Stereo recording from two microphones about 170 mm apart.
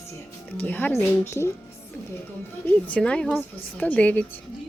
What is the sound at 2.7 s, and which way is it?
A woman's voice, 10° left (ahead or behind).